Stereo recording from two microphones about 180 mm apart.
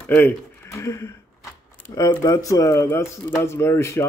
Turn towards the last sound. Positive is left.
turn(degrees=15)  # may be behind; listen again after turning